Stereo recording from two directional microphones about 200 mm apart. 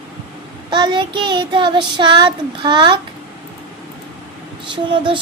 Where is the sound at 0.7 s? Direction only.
25° right (ahead or behind).